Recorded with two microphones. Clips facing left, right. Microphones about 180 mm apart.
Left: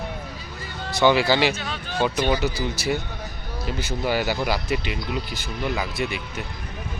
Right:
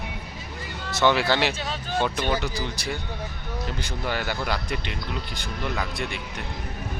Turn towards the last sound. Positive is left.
turn(degrees=5)  # may be behind; listen again after turning